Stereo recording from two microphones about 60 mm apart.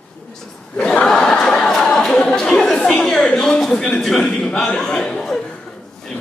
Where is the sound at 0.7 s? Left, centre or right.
Centre.